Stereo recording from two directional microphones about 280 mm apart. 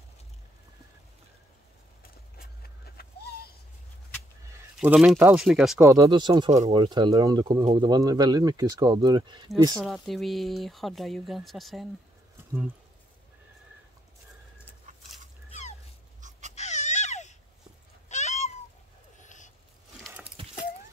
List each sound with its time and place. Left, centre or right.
4.7 s speech: centre
9.8 s speech: centre
14.9 s chicken: right
16.2 s a sound: right
16.5 s baby cry: left
18.0 s cat: left
19.2 s a sound: left